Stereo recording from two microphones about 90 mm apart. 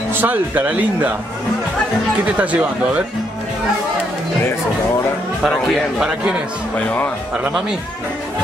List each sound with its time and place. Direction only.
0.1 s speech: 20° right (ahead or behind)
2.3 s speech: 15° right (ahead or behind)
5.4 s a man's voice: 5° right (ahead or behind)